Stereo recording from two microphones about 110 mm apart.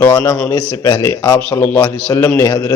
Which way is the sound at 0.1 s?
40° left (ahead or behind).